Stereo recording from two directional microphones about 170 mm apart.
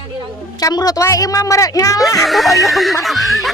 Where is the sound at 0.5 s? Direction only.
25° left (ahead or behind).